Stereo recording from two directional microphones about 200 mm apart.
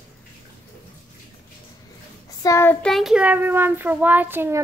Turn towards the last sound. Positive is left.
turn(degrees=-10)  # may be behind; listen again after turning